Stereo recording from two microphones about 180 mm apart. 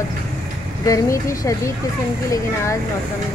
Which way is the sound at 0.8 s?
20° left (ahead or behind).